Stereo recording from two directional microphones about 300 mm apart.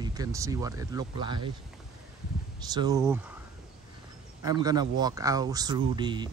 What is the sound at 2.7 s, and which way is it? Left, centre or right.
Speech, centre.